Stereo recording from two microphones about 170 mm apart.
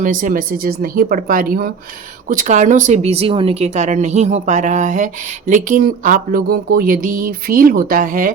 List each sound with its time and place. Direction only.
0.0 s speech: 50° right (ahead or behind)